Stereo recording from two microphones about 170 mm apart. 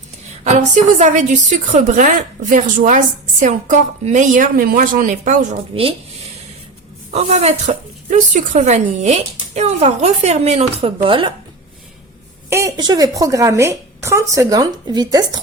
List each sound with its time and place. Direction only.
0.4 s a woman's voice: 40° right (ahead or behind)
7.1 s speech: 40° right (ahead or behind)
12.5 s a woman's voice: 20° right (ahead or behind)